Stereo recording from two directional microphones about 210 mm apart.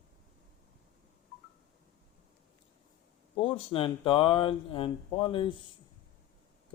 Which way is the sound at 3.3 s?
25° left (ahead or behind).